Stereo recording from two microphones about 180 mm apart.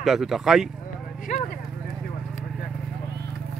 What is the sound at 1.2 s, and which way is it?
Clip-clop, 45° left (ahead or behind).